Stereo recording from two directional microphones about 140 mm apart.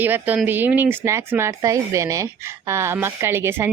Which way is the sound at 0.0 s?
10° right (ahead or behind).